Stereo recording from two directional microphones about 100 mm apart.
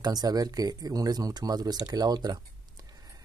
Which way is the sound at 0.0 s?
40° right (ahead or behind).